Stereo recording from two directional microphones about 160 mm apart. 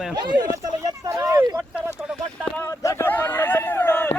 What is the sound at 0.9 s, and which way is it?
Vehicle, 20° right (ahead or behind).